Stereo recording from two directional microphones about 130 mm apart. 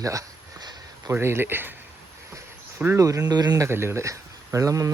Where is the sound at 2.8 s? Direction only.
20° right (ahead or behind).